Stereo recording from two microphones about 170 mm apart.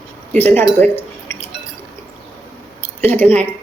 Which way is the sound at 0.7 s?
10° left (ahead or behind).